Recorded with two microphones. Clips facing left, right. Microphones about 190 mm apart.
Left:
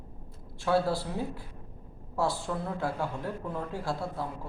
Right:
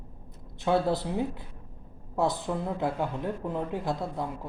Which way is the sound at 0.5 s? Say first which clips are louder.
Right 1 dB; 20° right (ahead or behind).